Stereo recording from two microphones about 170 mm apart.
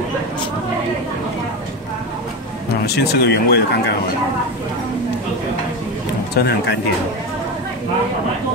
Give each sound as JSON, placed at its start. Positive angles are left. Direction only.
{"t": 2.9, "sound": "speech", "side_deg": 75}
{"t": 6.3, "sound": "speech", "side_deg": 75}